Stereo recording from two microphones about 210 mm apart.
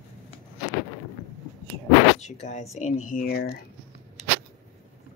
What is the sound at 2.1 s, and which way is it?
A woman's voice, 35° left (ahead or behind).